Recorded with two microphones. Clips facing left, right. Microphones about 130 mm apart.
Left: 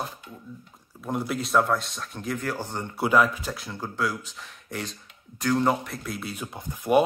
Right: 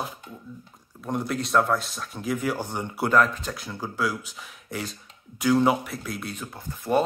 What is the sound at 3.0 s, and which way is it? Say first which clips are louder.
Speech: even; 10° left (ahead or behind).